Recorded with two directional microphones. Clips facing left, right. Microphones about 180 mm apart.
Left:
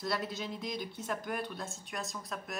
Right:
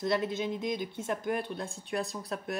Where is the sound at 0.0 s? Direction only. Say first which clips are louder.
Right 6 dB; 20° right (ahead or behind).